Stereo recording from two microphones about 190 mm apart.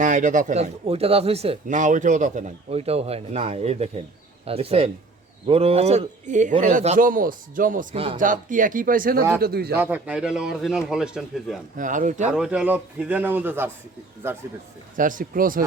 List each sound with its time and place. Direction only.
0.0 s speech: 40° right (ahead or behind)
7.9 s speech: 30° right (ahead or behind)
8.2 s a man's voice: 45° right (ahead or behind)
9.7 s a man's voice: 10° right (ahead or behind)
11.8 s speech: 45° right (ahead or behind)
12.3 s a man's voice: 5° right (ahead or behind)
14.9 s speech: 45° right (ahead or behind)